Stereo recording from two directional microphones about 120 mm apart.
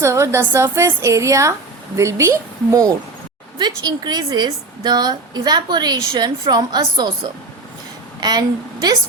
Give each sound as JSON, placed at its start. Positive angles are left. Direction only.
{"t": 0.0, "sound": "a woman's voice", "side_deg": -25}
{"t": 3.6, "sound": "a woman's voice", "side_deg": -35}
{"t": 8.2, "sound": "a woman's voice", "side_deg": -35}